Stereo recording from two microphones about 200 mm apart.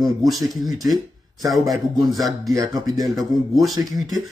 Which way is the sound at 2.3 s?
15° right (ahead or behind).